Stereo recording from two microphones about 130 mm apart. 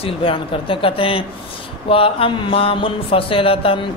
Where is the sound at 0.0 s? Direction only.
45° left (ahead or behind).